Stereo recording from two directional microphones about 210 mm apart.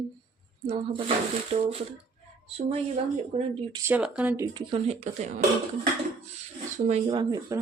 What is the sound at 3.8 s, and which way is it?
Speech, 5° right (ahead or behind).